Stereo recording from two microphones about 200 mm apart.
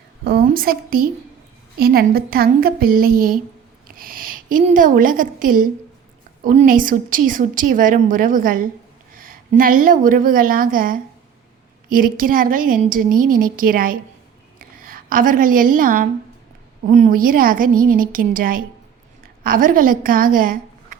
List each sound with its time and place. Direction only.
0.3 s a woman's voice: 50° right (ahead or behind)
3.8 s a sound: 45° right (ahead or behind)
4.6 s a woman's voice: 40° right (ahead or behind)